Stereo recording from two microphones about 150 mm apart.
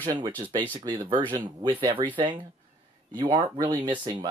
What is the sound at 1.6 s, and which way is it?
Speech, 30° right (ahead or behind).